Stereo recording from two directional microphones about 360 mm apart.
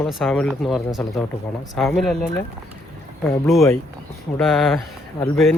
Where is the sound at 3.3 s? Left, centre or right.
Centre.